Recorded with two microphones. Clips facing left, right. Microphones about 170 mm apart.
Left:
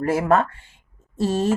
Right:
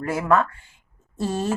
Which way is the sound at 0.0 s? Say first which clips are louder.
Left 2 dB; 25° left (ahead or behind).